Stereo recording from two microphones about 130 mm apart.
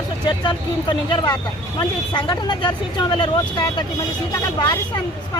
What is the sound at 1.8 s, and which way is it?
Speech, 35° left (ahead or behind).